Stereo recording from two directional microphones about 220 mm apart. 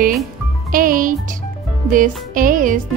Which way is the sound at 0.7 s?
40° right (ahead or behind).